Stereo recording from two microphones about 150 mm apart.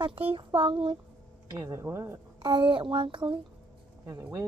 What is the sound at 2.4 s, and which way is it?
Speech, 30° right (ahead or behind).